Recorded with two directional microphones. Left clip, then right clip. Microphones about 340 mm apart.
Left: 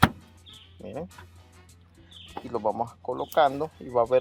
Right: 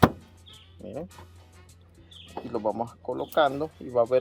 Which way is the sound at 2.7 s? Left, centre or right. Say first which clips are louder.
Left 1 dB; left.